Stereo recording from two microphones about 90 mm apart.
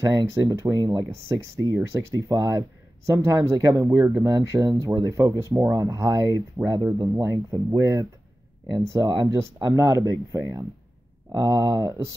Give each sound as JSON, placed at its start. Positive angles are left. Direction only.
{"t": 0.1, "sound": "speech", "side_deg": -45}
{"t": 3.1, "sound": "speech", "side_deg": -30}
{"t": 8.7, "sound": "speech", "side_deg": -50}
{"t": 9.3, "sound": "speech", "side_deg": -35}